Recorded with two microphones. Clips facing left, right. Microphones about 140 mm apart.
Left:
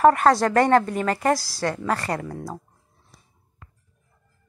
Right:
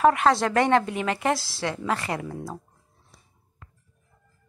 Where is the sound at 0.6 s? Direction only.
45° left (ahead or behind).